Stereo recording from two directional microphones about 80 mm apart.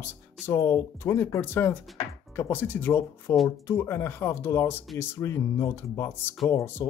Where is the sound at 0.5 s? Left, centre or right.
Left.